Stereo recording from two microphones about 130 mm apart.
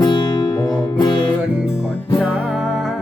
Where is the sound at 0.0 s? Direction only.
35° left (ahead or behind).